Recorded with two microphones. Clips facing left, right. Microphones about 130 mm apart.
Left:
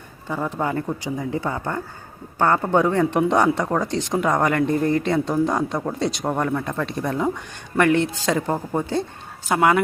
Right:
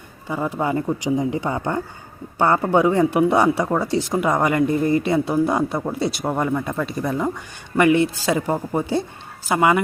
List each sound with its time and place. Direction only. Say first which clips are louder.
0.3 s speech: right 2 dB; 5° right (ahead or behind)